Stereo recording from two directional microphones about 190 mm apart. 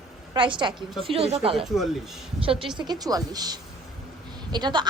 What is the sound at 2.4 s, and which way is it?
A woman's voice, 30° right (ahead or behind).